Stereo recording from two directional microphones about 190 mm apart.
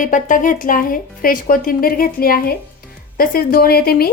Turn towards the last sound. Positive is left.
turn(degrees=55)  # may be behind; listen again after turning